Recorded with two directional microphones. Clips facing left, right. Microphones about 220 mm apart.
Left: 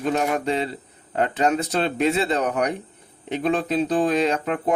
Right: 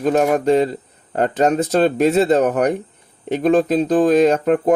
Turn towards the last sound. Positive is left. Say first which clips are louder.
# right 8 dB
turn(degrees=-45)  # may be behind; listen again after turning